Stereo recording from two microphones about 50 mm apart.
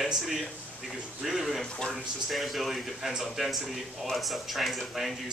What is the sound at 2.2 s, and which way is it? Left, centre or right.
Speech, centre.